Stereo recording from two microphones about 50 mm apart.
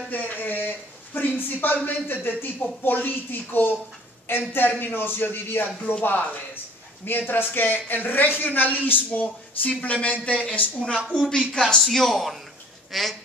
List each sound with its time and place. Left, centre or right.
0.1 s a man's voice: left
11.1 s speech: centre